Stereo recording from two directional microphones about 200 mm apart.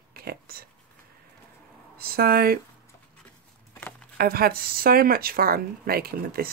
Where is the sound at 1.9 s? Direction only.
50° right (ahead or behind).